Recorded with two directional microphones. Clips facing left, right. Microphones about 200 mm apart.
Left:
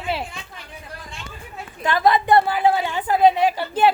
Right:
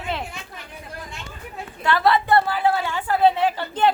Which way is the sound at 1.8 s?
15° left (ahead or behind).